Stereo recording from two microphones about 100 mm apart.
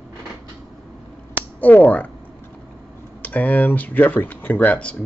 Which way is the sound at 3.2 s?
15° left (ahead or behind).